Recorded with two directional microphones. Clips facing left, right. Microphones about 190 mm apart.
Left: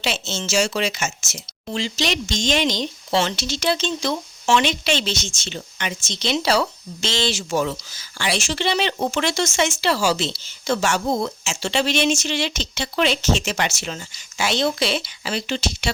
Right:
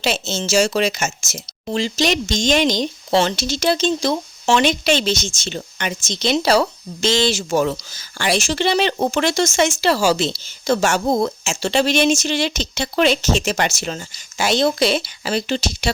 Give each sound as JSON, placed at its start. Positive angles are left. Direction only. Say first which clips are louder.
{"t": 0.0, "sound": "speech", "louder": "right 4 dB", "side_deg": -40}